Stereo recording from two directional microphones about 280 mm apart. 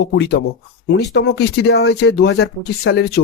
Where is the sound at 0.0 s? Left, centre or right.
Left.